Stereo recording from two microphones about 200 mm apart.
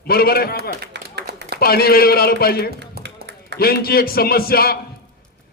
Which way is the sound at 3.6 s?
50° left (ahead or behind).